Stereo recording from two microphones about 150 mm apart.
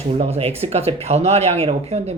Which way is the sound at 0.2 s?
40° right (ahead or behind).